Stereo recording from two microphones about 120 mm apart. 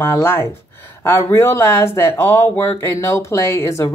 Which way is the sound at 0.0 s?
20° left (ahead or behind).